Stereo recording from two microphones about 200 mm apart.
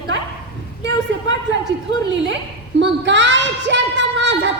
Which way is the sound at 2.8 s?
65° right (ahead or behind).